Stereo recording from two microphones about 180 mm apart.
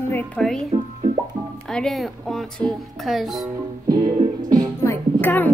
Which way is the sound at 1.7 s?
Centre (ahead or behind).